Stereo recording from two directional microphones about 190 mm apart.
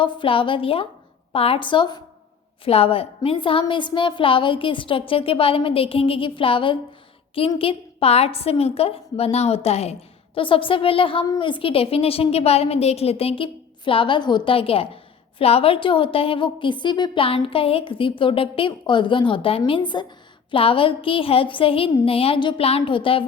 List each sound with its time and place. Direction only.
0.0 s a woman's voice: 25° left (ahead or behind)